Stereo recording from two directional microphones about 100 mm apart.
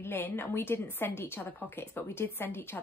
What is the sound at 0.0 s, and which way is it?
A woman's voice, 20° left (ahead or behind).